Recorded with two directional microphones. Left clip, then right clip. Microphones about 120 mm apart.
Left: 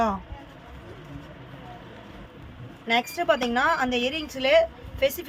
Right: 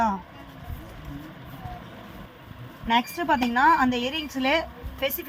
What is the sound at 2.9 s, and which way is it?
Speech, 90° left.